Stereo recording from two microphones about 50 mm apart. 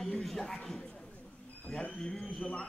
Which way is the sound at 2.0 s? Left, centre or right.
Centre.